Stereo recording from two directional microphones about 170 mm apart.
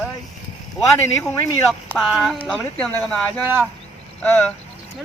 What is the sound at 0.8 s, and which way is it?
Speech, 15° left (ahead or behind).